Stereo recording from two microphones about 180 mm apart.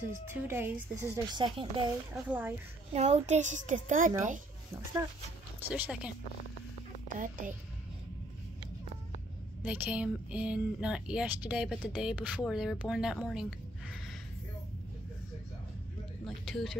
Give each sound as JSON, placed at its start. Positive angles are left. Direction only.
{"t": 0.3, "sound": "a woman's voice", "side_deg": -10}
{"t": 2.2, "sound": "a woman's voice", "side_deg": -10}
{"t": 2.9, "sound": "a child's voice", "side_deg": -35}
{"t": 5.6, "sound": "a woman's voice", "side_deg": -10}
{"t": 7.1, "sound": "a woman's voice", "side_deg": -50}
{"t": 9.6, "sound": "speech", "side_deg": -10}
{"t": 16.3, "sound": "a sound", "side_deg": 0}